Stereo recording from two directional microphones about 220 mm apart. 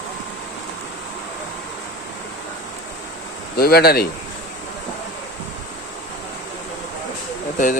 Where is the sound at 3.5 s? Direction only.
45° left (ahead or behind).